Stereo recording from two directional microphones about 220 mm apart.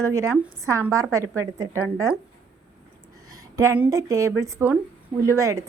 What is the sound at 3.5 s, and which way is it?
A woman's voice, 10° right (ahead or behind).